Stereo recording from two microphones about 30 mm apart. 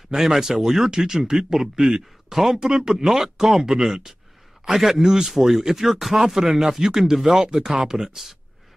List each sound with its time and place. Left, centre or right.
0.1 s speech: centre
2.3 s speech: centre
2.7 s speech: right